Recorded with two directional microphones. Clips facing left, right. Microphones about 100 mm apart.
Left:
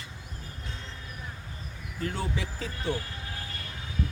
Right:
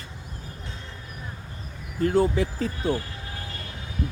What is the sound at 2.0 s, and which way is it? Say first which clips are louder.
Speech: right 11 dB; 45° right (ahead or behind).